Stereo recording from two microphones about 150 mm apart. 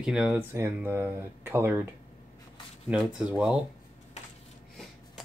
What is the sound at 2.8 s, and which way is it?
Speech, 5° right (ahead or behind).